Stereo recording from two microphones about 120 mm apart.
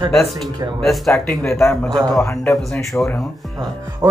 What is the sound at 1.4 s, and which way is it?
Speech, 20° left (ahead or behind).